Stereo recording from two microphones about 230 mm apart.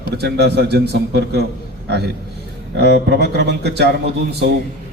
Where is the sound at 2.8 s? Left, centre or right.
Right.